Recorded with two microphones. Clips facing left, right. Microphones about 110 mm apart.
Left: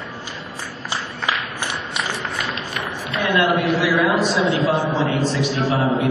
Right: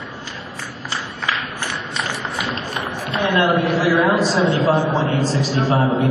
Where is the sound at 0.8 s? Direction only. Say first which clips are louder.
Even; 15° left (ahead or behind).